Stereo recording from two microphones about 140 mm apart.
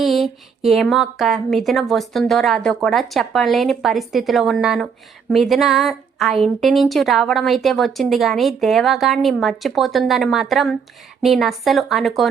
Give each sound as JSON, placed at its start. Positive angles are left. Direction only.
{"t": 0.0, "sound": "a woman's voice", "side_deg": 0}